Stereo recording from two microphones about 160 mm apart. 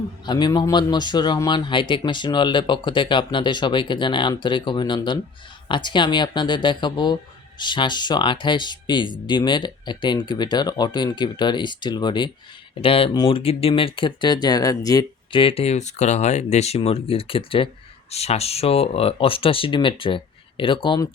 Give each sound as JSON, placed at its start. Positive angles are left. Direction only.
{"t": 0.3, "sound": "speech", "side_deg": 25}